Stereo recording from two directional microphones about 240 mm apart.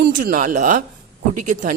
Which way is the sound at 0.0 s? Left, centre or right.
Right.